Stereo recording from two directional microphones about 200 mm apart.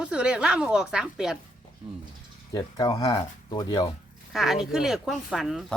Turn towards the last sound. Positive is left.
turn(degrees=0)  # may be behind; listen again after turning